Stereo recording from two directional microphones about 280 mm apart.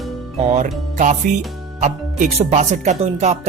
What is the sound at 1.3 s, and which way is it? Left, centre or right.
Speech, right.